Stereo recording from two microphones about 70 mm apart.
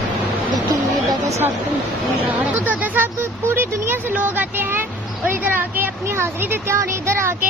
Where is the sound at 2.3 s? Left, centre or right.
Right.